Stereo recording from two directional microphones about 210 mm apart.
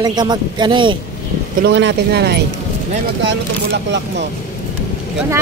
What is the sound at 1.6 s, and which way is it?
Speech, 55° right (ahead or behind).